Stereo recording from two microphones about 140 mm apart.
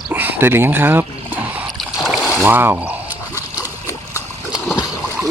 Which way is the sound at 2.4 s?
15° right (ahead or behind).